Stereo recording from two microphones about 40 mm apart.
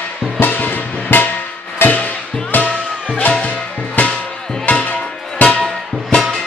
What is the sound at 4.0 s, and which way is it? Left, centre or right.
Music, left.